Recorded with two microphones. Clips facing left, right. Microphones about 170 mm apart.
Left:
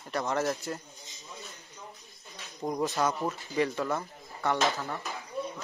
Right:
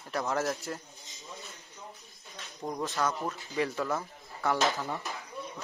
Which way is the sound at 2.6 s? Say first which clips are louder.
Left 3 dB; 10° left (ahead or behind).